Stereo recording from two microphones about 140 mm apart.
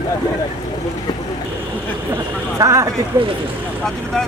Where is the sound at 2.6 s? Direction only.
25° right (ahead or behind).